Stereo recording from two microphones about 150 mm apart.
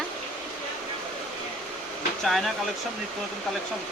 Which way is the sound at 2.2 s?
Centre (ahead or behind).